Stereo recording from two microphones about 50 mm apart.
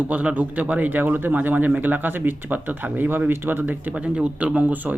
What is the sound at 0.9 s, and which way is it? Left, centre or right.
Speech, right.